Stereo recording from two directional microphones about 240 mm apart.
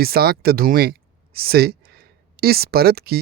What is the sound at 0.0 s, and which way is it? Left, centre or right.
Speech, right.